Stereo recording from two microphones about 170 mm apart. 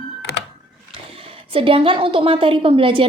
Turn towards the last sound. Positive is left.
turn(degrees=-30)  # may be behind; listen again after turning